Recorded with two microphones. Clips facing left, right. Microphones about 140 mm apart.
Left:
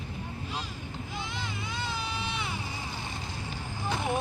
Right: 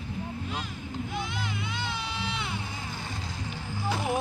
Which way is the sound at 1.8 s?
Centre (ahead or behind).